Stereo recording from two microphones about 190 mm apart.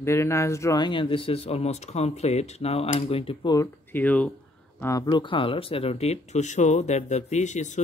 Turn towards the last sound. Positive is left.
turn(degrees=40)  # may be behind; listen again after turning